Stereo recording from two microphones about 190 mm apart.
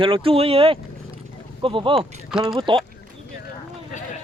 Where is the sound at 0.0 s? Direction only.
30° right (ahead or behind).